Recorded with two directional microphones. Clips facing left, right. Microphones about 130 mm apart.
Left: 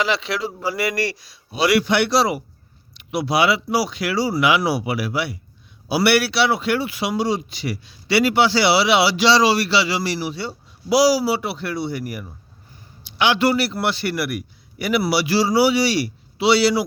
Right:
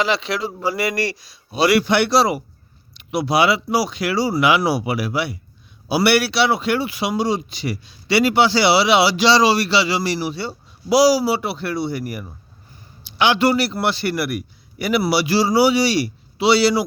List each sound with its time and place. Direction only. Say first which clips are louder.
0.0 s a man's voice: right 1 dB; 25° right (ahead or behind)
1.5 s a man's voice: right 2 dB; 35° right (ahead or behind)